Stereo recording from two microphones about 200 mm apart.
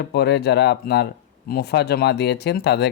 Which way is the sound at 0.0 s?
55° left (ahead or behind).